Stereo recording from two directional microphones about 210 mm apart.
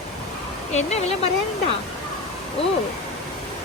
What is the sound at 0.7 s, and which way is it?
Speech, 30° left (ahead or behind).